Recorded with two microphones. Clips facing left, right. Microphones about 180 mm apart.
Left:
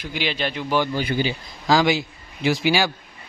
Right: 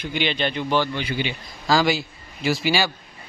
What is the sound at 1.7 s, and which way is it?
A man's voice, 15° left (ahead or behind).